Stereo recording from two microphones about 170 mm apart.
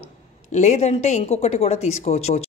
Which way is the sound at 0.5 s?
40° left (ahead or behind).